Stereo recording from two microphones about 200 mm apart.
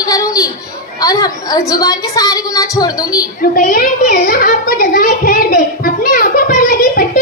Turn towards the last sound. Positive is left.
turn(degrees=45)  # may be behind; listen again after turning